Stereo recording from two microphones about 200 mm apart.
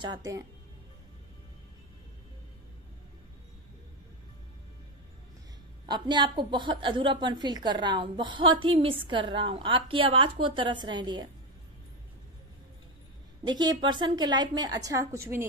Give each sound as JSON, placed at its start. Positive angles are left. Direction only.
{"t": 0.0, "sound": "a woman's voice", "side_deg": -20}
{"t": 5.9, "sound": "a woman's voice", "side_deg": -20}
{"t": 13.5, "sound": "a woman's voice", "side_deg": -20}